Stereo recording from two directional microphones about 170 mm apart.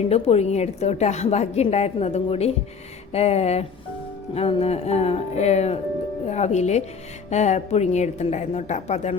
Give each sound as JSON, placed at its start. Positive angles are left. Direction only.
{"t": 0.0, "sound": "a woman's voice", "side_deg": 40}